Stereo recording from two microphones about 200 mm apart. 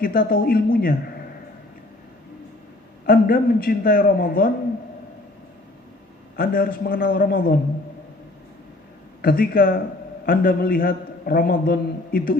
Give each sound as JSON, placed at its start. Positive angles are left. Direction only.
{"t": 0.0, "sound": "a man's voice", "side_deg": 45}
{"t": 3.1, "sound": "a man's voice", "side_deg": 45}
{"t": 6.3, "sound": "a man's voice", "side_deg": 45}
{"t": 9.2, "sound": "a man's voice", "side_deg": 45}